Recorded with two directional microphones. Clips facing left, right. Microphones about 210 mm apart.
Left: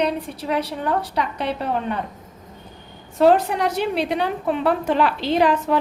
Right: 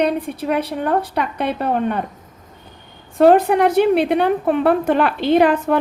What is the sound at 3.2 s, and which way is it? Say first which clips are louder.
A woman's voice: right 4 dB; 55° right (ahead or behind).